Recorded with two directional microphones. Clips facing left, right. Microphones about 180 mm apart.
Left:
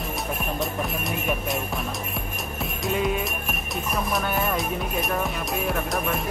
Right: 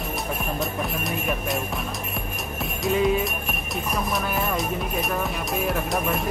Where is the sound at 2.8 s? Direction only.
Centre (ahead or behind).